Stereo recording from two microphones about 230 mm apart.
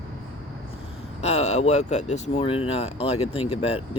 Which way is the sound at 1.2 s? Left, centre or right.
Left.